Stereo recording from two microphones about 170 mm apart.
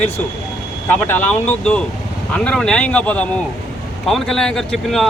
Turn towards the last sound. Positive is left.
turn(degrees=0)  # may be behind; listen again after turning